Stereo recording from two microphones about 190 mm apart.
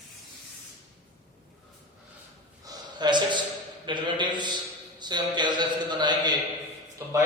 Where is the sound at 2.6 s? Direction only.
25° right (ahead or behind).